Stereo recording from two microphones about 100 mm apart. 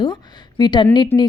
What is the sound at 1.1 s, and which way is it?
Speech, 25° left (ahead or behind).